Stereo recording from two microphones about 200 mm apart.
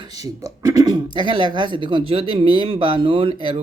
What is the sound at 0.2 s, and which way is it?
Speech, 15° right (ahead or behind).